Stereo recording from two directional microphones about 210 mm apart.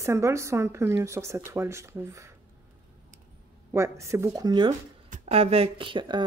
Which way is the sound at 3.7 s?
15° right (ahead or behind).